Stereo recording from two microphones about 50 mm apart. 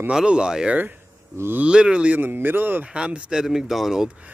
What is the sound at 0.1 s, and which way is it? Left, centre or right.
Speech, centre.